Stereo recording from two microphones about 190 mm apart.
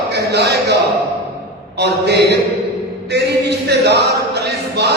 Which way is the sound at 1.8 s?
60° right (ahead or behind).